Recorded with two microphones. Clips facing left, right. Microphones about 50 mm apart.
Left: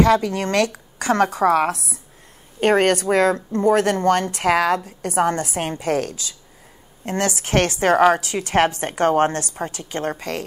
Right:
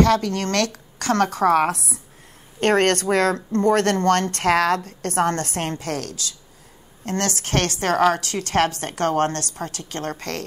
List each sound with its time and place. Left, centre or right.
0.0 s speech: centre